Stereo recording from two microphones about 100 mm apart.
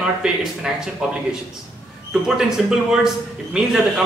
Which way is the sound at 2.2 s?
5° right (ahead or behind).